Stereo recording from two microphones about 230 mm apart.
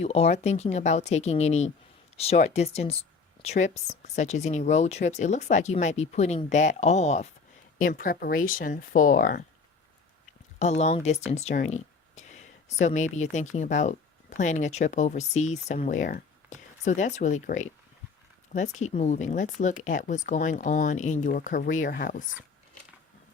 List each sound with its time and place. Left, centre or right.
0.0 s speech: left
10.6 s speech: left